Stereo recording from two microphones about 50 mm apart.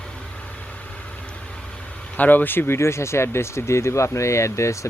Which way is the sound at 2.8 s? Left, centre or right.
Left.